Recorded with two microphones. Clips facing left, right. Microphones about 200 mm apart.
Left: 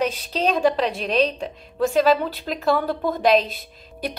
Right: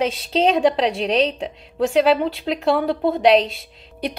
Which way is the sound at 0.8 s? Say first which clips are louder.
Right 2 dB; 80° right.